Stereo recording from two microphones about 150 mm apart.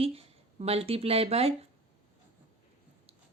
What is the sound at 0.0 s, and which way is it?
Speech, 40° right (ahead or behind).